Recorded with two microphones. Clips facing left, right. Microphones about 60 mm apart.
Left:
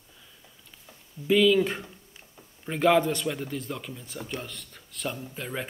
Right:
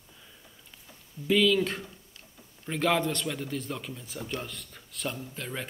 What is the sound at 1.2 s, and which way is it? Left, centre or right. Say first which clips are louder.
Speech: left 3 dB; centre.